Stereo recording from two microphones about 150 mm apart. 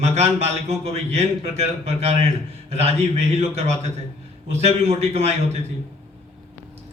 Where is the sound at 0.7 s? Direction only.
45° right (ahead or behind).